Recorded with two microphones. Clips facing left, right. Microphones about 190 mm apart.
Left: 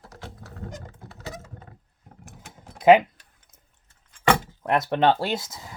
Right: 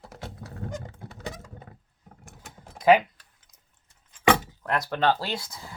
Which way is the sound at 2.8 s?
25° left (ahead or behind).